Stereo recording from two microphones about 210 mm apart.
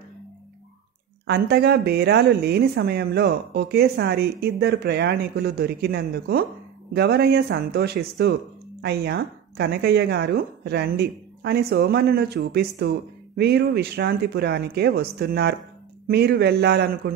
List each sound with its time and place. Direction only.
1.2 s speech: 50° right (ahead or behind)